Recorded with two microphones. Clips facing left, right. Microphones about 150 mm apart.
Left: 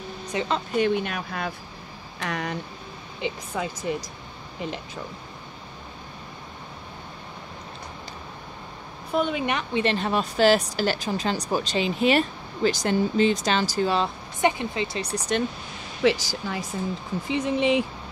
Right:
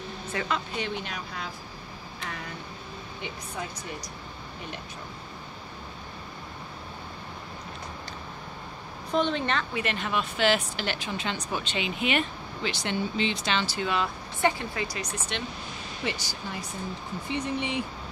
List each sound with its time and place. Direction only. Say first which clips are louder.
0.3 s speech: left 5 dB; 20° left (ahead or behind)
0.7 s speech: left 10 dB; 55° left (ahead or behind)
2.1 s speech: left 9 dB; 85° left
3.9 s speech: left 10 dB; 90° left
9.1 s a woman's voice: left 2 dB; 10° left (ahead or behind)
9.8 s speech: left 6 dB; 30° left (ahead or behind)
14.4 s speech: left 3 dB; 20° left (ahead or behind); by 15.4 s 40° left (ahead or behind)
16.0 s speech: left 12 dB; 90° left